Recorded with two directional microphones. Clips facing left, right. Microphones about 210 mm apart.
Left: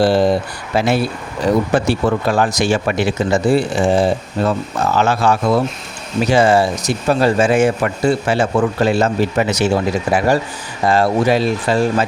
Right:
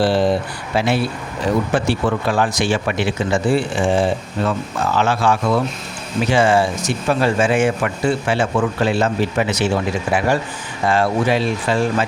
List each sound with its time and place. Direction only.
0.0 s a man's voice: 40° left (ahead or behind)